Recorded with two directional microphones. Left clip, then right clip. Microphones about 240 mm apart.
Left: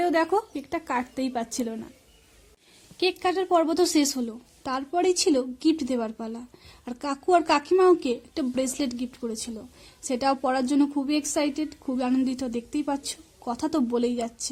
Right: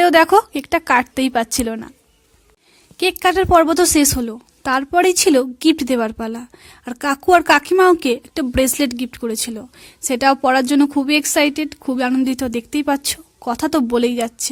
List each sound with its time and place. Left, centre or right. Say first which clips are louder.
0.0 s speech: right 12 dB; right
3.0 s speech: right 9 dB; right